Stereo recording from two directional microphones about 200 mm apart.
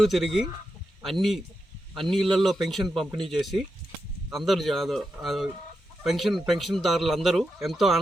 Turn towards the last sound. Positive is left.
turn(degrees=0)  # may be behind; listen again after turning